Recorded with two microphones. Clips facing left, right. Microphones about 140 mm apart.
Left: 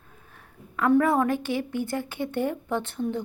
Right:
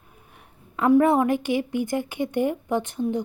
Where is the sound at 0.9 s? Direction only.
25° right (ahead or behind).